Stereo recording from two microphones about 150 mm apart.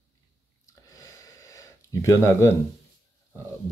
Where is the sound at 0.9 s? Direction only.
20° left (ahead or behind).